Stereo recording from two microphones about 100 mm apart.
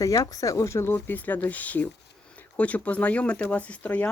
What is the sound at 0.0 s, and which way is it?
Speech, 35° left (ahead or behind).